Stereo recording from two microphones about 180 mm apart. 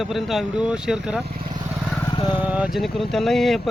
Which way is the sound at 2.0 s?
25° left (ahead or behind).